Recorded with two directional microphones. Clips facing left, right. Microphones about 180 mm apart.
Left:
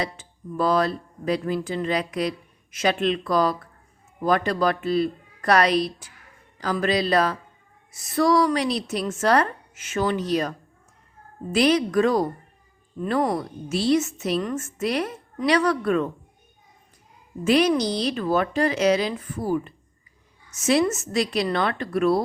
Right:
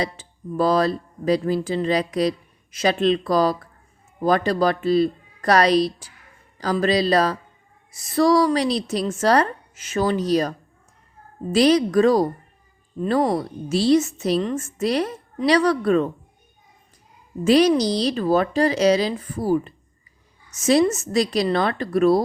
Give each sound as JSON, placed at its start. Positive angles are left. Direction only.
{"t": 0.0, "sound": "a woman's voice", "side_deg": -35}
{"t": 11.5, "sound": "a woman's voice", "side_deg": -35}
{"t": 17.4, "sound": "a woman's voice", "side_deg": -35}